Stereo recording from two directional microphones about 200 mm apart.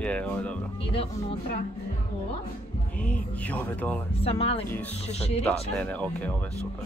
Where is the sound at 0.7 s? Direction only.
30° left (ahead or behind).